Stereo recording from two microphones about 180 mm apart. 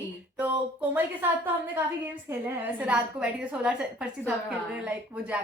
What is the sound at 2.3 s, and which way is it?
Speech, 10° right (ahead or behind).